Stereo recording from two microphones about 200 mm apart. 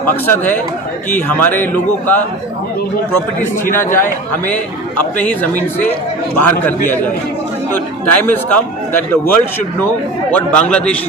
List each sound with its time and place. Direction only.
0.0 s a man's voice: 10° left (ahead or behind)
3.5 s a man's voice: 10° left (ahead or behind)
8.0 s a man's voice: 10° left (ahead or behind)